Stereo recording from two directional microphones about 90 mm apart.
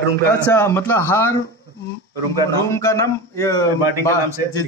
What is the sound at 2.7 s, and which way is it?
A man's voice, 30° left (ahead or behind).